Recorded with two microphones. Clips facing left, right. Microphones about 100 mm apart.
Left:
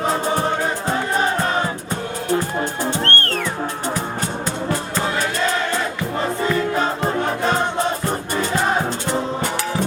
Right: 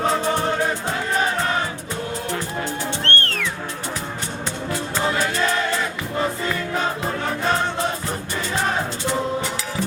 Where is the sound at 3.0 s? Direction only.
40° left (ahead or behind).